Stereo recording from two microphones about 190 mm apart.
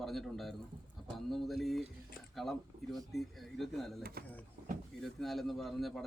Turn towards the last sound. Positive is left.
turn(degrees=0)  # may be behind; listen again after turning